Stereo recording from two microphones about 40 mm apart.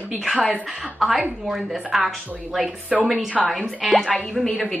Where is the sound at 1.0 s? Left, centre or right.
Centre.